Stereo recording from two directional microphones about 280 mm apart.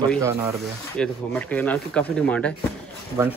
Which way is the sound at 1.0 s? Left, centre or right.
Centre.